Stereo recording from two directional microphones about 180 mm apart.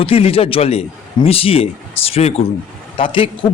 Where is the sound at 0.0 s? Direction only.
30° left (ahead or behind).